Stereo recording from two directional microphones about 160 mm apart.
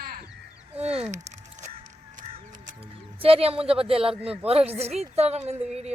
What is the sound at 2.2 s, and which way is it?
Crow, 45° right (ahead or behind).